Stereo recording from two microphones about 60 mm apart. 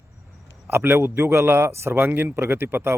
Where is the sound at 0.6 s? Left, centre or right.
Right.